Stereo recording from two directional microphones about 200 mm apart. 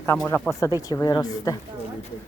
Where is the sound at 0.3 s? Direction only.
10° left (ahead or behind).